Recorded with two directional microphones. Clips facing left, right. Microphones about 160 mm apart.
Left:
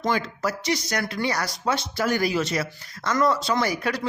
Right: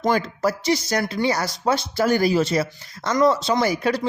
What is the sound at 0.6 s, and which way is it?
Speech, 30° right (ahead or behind).